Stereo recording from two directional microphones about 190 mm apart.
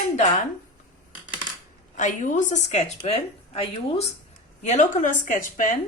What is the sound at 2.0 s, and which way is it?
A woman's voice, 40° left (ahead or behind).